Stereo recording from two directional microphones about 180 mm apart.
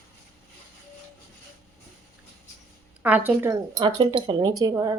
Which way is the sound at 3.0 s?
10° right (ahead or behind).